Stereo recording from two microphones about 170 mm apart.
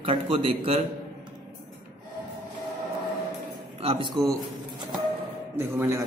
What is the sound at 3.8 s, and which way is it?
Speech, 35° right (ahead or behind).